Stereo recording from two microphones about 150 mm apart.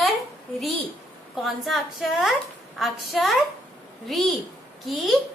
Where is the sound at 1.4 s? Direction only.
Centre (ahead or behind).